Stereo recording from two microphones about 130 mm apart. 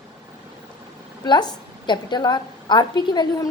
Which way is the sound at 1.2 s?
35° left (ahead or behind).